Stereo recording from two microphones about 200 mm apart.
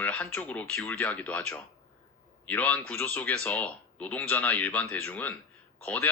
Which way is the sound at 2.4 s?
10° left (ahead or behind).